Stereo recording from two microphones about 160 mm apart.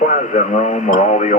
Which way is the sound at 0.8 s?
55° left (ahead or behind).